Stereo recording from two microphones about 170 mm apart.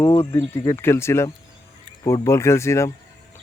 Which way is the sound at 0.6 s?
15° left (ahead or behind).